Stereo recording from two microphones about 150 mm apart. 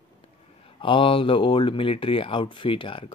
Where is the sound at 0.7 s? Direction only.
35° left (ahead or behind).